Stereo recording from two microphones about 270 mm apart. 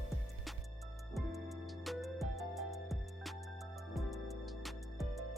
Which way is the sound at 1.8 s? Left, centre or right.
Centre.